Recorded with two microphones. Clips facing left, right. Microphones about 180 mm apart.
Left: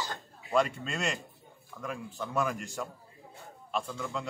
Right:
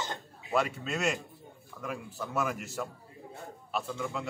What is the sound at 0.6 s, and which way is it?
A man's voice, 5° right (ahead or behind).